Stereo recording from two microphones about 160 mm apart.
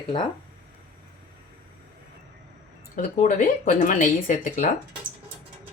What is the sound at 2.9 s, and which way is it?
Speech, 50° left (ahead or behind).